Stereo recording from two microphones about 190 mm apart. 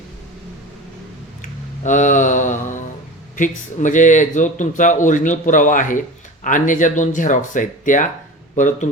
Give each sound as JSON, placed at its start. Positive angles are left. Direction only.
{"t": 1.8, "sound": "mantra", "side_deg": 40}
{"t": 3.3, "sound": "a man's voice", "side_deg": 40}